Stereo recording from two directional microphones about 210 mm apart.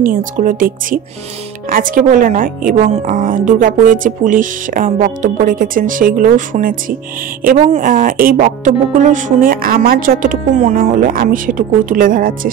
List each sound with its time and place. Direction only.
0.0 s speech: 40° right (ahead or behind)